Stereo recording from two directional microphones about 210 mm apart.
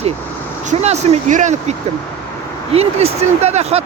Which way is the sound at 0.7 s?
30° right (ahead or behind).